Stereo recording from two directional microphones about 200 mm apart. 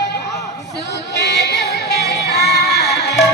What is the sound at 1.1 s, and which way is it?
Music, 60° left (ahead or behind).